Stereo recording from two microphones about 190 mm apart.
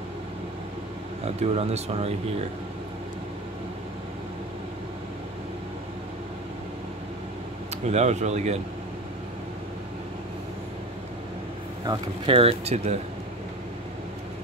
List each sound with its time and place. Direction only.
1.2 s speech: 35° right (ahead or behind)
7.7 s speech: 35° right (ahead or behind)
11.8 s speech: 25° right (ahead or behind)